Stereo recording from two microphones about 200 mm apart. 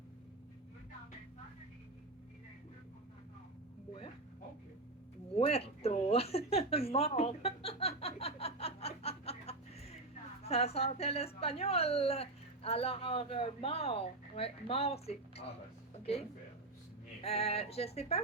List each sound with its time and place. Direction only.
5.4 s a sound: 30° left (ahead or behind)
10.4 s a woman's voice: 30° left (ahead or behind)
17.2 s a woman's voice: 30° left (ahead or behind)